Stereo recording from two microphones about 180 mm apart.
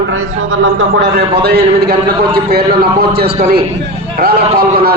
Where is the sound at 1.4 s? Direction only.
60° right (ahead or behind).